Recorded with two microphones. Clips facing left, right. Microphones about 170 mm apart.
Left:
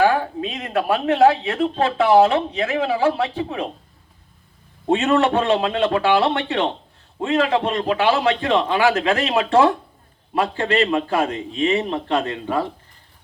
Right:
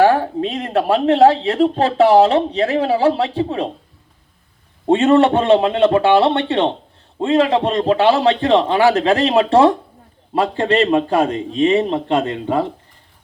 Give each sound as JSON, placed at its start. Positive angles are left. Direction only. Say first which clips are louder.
{"t": 0.0, "sound": "speech", "louder": "right 4 dB", "side_deg": -35}
{"t": 4.9, "sound": "a man's voice", "louder": "right 5 dB", "side_deg": -25}